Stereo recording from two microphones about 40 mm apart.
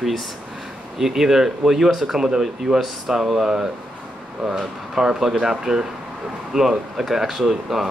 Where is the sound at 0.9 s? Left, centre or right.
Centre.